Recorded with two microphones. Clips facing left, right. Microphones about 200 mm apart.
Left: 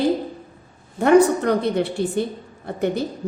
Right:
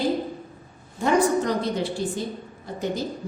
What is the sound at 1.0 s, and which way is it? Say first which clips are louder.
A woman's voice: left 6 dB; 60° left (ahead or behind).